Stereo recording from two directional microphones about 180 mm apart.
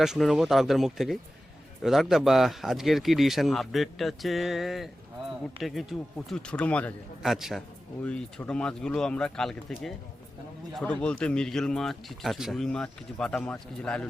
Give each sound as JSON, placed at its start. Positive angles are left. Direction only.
{"t": 0.0, "sound": "speech", "side_deg": 0}